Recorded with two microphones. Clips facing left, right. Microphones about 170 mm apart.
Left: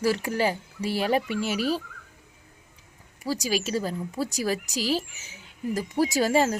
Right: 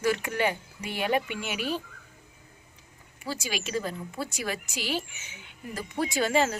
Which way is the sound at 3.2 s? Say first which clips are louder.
Left 6 dB; 40° left (ahead or behind).